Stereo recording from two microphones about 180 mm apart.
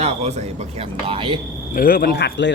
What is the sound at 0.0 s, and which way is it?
Speech, 40° right (ahead or behind).